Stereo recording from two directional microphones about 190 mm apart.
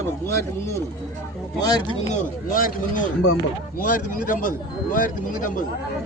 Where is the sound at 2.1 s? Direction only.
45° left (ahead or behind).